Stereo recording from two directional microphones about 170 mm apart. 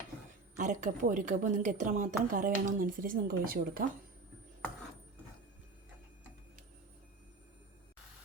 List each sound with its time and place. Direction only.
0.5 s a woman's voice: 45° right (ahead or behind)